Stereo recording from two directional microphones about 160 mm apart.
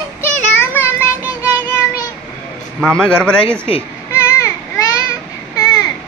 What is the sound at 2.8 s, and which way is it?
Speech, 5° left (ahead or behind).